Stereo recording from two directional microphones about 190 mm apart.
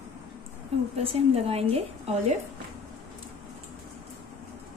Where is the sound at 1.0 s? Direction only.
30° right (ahead or behind).